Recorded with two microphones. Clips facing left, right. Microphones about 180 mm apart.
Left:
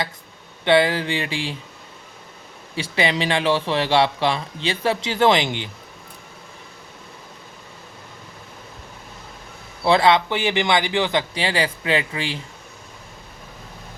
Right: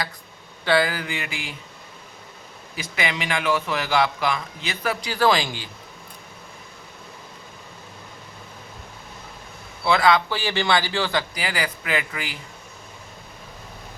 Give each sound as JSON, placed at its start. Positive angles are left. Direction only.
{"t": 0.6, "sound": "speech", "side_deg": 25}
{"t": 2.7, "sound": "speech", "side_deg": 30}
{"t": 9.8, "sound": "speech", "side_deg": 30}